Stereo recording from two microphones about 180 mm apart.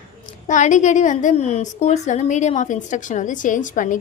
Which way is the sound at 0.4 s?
45° left (ahead or behind).